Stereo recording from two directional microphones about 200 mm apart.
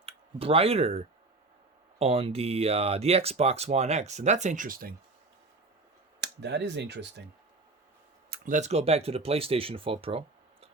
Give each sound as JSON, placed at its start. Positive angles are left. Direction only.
{"t": 0.3, "sound": "speech", "side_deg": -30}
{"t": 6.1, "sound": "speech", "side_deg": -60}
{"t": 8.3, "sound": "speech", "side_deg": -40}